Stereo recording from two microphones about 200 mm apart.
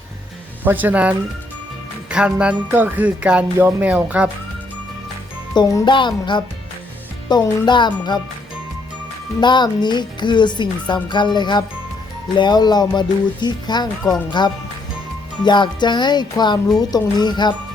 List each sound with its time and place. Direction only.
0.6 s music: 10° right (ahead or behind)
5.5 s speech: 20° left (ahead or behind)
9.4 s speech: 20° left (ahead or behind)